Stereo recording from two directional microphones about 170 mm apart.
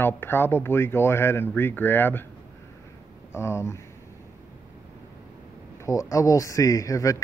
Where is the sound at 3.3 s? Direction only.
15° left (ahead or behind).